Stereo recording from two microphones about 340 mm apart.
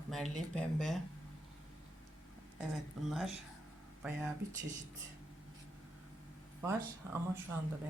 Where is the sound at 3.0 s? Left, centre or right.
Centre.